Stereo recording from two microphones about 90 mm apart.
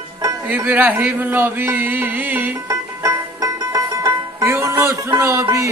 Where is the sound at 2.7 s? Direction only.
40° right (ahead or behind).